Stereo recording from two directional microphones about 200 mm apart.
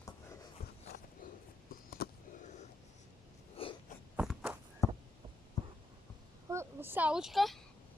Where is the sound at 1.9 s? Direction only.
50° left (ahead or behind).